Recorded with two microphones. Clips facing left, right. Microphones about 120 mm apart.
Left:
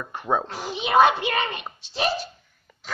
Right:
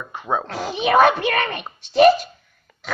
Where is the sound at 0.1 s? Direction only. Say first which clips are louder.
Even; 10° right (ahead or behind).